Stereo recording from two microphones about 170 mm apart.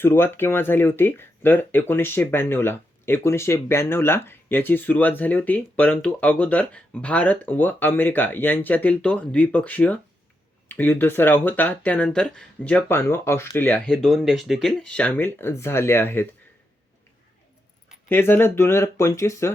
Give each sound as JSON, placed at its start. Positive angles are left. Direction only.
{"t": 0.0, "sound": "speech", "side_deg": 15}
{"t": 18.1, "sound": "speech", "side_deg": 15}